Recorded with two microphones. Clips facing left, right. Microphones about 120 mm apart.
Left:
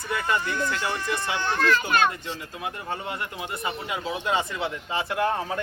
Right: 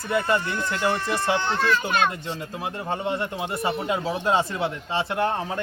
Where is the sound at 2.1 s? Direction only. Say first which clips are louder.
Right 3 dB; 30° right (ahead or behind).